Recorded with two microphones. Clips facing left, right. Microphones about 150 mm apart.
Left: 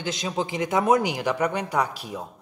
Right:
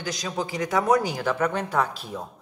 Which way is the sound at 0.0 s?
25° left (ahead or behind).